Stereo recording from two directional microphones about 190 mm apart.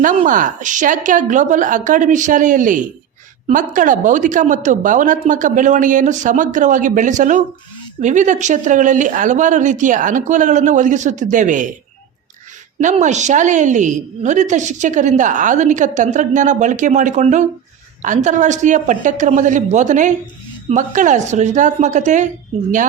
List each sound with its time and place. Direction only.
0.0 s a woman's voice: 45° right (ahead or behind)
12.8 s a woman's voice: 40° right (ahead or behind)